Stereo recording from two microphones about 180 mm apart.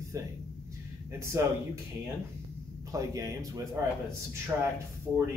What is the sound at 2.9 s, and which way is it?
Speech, 15° right (ahead or behind).